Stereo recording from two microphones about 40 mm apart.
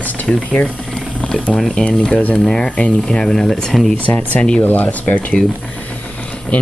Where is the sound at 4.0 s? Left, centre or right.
Left.